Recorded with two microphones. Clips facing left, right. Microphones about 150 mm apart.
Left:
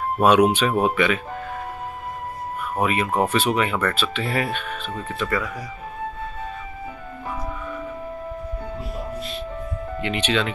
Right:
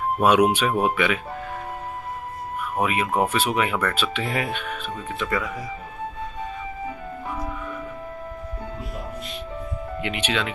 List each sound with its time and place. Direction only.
0.2 s speech: 10° right (ahead or behind)
2.8 s speech: 10° right (ahead or behind)
10.0 s speech: 10° right (ahead or behind)